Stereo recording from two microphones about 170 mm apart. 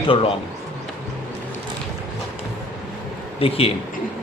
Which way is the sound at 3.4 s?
35° left (ahead or behind).